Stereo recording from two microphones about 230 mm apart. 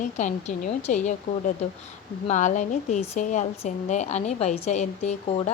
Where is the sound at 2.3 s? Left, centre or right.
Left.